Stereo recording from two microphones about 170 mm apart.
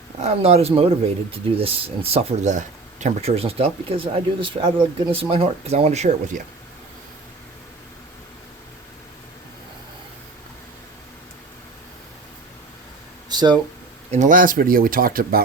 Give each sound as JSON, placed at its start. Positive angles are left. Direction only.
{"t": 0.2, "sound": "speech", "side_deg": -40}
{"t": 13.3, "sound": "speech", "side_deg": -25}
{"t": 14.1, "sound": "speech", "side_deg": -50}